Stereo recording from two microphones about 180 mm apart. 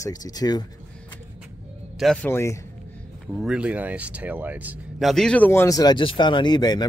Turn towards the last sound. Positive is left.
turn(degrees=20)  # may be behind; listen again after turning